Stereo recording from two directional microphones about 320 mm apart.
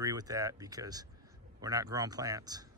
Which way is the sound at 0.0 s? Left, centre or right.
Centre.